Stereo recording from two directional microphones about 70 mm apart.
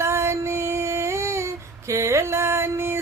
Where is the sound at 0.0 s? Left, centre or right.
Right.